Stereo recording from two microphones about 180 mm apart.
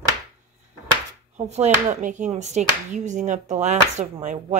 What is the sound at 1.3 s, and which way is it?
Speech, 40° right (ahead or behind).